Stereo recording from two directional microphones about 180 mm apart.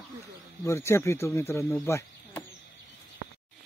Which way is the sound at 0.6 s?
15° left (ahead or behind).